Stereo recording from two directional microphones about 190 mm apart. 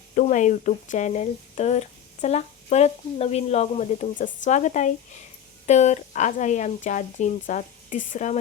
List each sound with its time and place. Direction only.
0.2 s speech: 40° left (ahead or behind)